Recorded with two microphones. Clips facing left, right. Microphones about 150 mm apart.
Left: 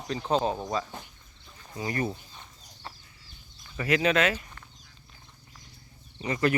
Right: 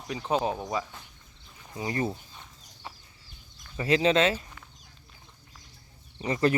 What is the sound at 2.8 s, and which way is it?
Chicken, 10° right (ahead or behind).